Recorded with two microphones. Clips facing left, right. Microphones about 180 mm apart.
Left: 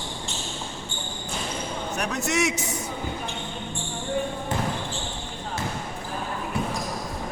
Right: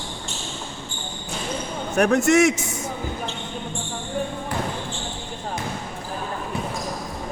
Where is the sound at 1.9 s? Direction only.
50° right (ahead or behind).